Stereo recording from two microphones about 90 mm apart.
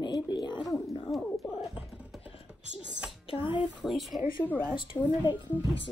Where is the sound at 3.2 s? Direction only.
75° left (ahead or behind).